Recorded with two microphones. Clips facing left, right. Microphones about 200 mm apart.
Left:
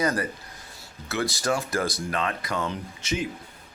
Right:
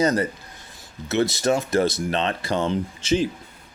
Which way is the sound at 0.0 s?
25° right (ahead or behind).